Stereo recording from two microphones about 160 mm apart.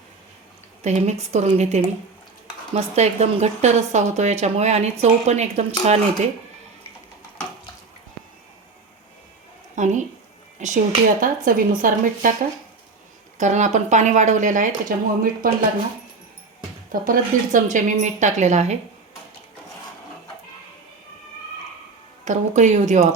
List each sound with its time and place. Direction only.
0.8 s a woman's voice: 45° right (ahead or behind)
9.7 s a woman's voice: 50° right (ahead or behind)
11.2 s speech: 60° right (ahead or behind)
13.4 s a woman's voice: 50° right (ahead or behind)
16.9 s a woman's voice: 55° right (ahead or behind)
22.2 s a woman's voice: 50° right (ahead or behind)